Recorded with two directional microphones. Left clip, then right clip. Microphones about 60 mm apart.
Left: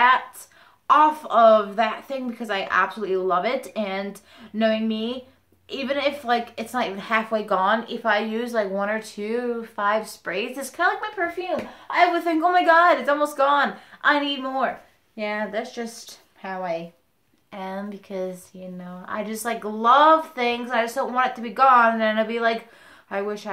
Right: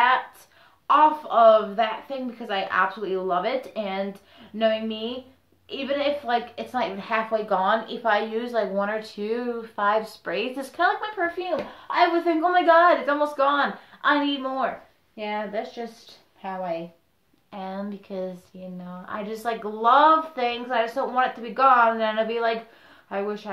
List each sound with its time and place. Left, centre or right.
0.8 s a woman's voice: left; by 11.4 s centre
11.9 s a woman's voice: left
12.3 s a woman's voice: left
17.5 s a woman's voice: centre
18.5 s a woman's voice: left
19.4 s a woman's voice: centre